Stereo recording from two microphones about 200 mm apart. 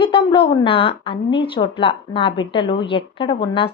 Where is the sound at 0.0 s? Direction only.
25° left (ahead or behind).